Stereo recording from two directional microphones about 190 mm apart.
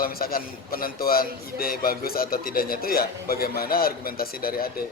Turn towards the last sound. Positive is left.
turn(degrees=50)  # may be behind; listen again after turning